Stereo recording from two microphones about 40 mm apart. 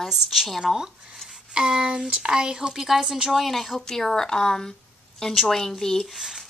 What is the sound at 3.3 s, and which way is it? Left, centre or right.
A woman's voice, centre.